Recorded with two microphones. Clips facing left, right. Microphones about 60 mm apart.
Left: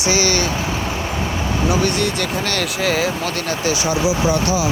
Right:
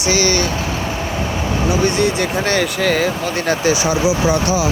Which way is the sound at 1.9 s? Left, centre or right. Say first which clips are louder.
Right 3 dB; centre.